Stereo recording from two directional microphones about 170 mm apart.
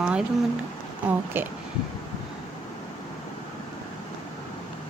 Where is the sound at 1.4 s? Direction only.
15° right (ahead or behind).